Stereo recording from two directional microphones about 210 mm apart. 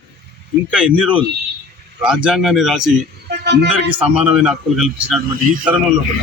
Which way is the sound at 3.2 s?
55° right (ahead or behind).